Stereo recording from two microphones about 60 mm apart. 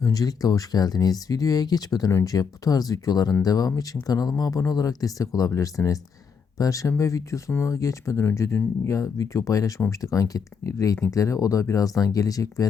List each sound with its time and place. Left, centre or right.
0.0 s speech: left
5.5 s speech: left
8.2 s speech: left
8.9 s speech: left